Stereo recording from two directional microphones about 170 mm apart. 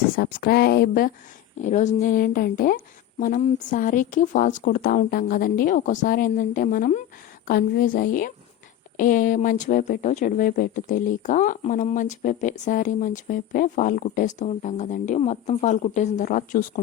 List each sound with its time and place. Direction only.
0.2 s speech: 65° left (ahead or behind)
1.6 s speech: 45° left (ahead or behind)